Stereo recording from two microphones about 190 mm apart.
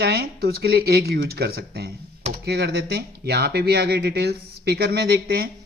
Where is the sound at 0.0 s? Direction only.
55° right (ahead or behind).